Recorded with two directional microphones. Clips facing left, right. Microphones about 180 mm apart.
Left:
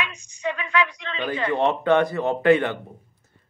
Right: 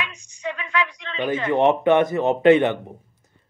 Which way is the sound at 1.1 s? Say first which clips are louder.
Right 4 dB; 20° right (ahead or behind).